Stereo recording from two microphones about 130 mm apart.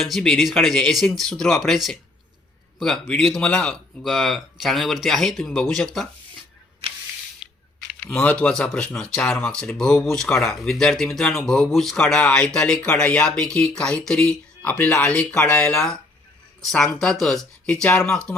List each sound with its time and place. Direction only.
0.0 s speech: 5° left (ahead or behind)
8.0 s speech: 10° left (ahead or behind)